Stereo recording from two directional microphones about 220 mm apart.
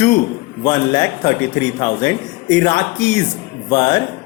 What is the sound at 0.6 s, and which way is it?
Speech, 20° left (ahead or behind).